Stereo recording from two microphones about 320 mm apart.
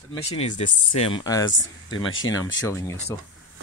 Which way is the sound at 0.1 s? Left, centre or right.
Centre.